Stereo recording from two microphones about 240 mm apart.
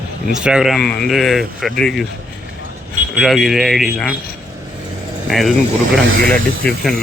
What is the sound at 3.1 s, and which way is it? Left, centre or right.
Speech, centre.